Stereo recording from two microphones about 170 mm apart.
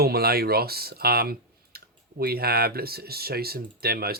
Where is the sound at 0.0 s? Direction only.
65° right (ahead or behind).